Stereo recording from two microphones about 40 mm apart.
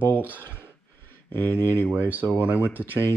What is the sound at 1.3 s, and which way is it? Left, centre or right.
Speech, left.